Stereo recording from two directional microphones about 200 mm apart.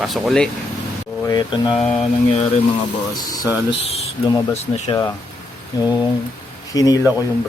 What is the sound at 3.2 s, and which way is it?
Speech, 20° left (ahead or behind).